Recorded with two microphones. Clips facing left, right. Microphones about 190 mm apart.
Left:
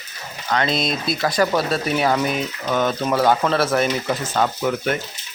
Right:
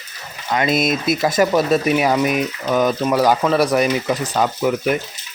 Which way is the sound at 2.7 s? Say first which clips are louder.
Right 3 dB; centre (ahead or behind).